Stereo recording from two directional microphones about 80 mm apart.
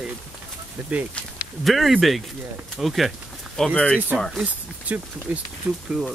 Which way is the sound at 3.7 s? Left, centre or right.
Centre.